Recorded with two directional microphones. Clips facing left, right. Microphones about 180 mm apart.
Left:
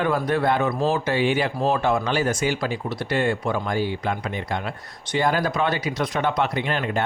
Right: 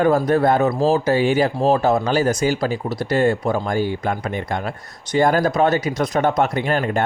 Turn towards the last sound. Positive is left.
turn(degrees=-45)  # may be behind; listen again after turning